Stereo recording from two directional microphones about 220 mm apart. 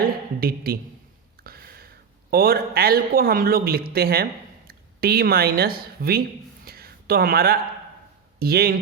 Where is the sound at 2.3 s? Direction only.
45° right (ahead or behind).